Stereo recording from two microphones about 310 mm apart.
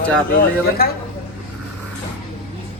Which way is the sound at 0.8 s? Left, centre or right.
Left.